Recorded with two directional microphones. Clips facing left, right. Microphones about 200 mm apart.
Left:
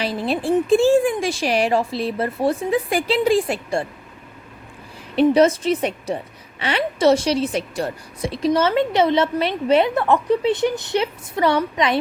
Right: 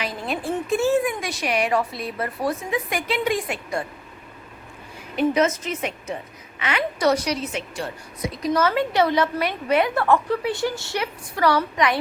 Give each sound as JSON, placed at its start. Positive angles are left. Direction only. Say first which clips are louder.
{"t": 0.0, "sound": "a woman's voice", "louder": "left 5 dB", "side_deg": 30}
{"t": 5.1, "sound": "a woman's voice", "louder": "left 6 dB", "side_deg": 30}